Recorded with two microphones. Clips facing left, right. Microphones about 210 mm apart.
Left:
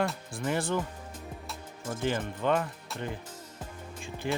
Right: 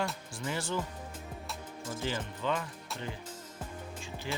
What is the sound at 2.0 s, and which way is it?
Speech, 55° left (ahead or behind).